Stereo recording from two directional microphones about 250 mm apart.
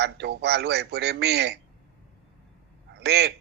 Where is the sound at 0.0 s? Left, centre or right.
Right.